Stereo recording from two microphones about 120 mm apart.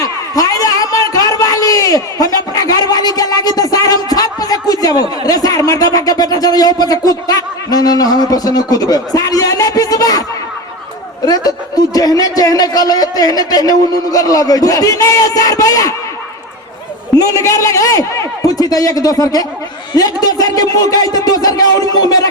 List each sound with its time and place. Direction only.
0.0 s a sound: 30° left (ahead or behind)
11.3 s a man's voice: 35° left (ahead or behind)
17.2 s a man's voice: 25° left (ahead or behind)